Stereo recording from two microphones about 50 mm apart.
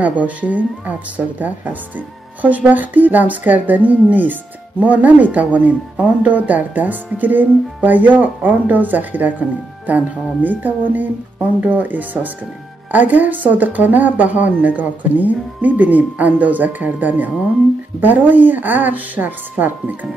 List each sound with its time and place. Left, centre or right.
0.0 s speech: right